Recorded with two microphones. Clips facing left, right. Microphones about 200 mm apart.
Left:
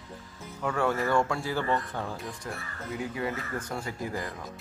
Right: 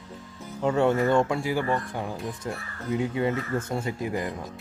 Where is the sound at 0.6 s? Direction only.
25° right (ahead or behind).